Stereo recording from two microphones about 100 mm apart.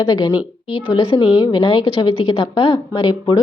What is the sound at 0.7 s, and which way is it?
A woman's voice, 70° left (ahead or behind).